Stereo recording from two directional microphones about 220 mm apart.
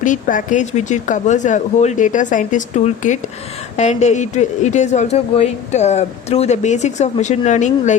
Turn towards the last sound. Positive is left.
turn(degrees=35)  # may be behind; listen again after turning